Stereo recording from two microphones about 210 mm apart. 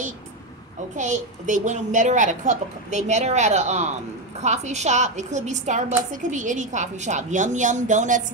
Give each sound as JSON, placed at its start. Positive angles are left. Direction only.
{"t": 0.9, "sound": "a woman's voice", "side_deg": -35}